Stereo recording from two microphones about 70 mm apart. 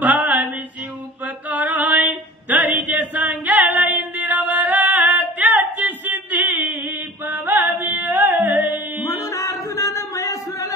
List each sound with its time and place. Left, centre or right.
0.0 s female singing: right
1.2 s a sound: right
7.8 s music: right
9.0 s music: left